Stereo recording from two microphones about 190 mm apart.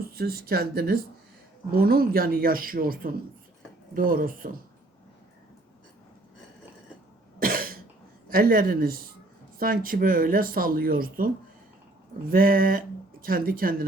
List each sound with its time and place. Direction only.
0.1 s speech: 55° right (ahead or behind)
7.3 s cough: 50° right (ahead or behind)
8.3 s speech: 50° right (ahead or behind)
12.3 s speech: 50° right (ahead or behind)